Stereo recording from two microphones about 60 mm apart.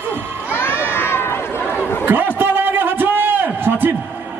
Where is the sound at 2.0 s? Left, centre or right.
Right.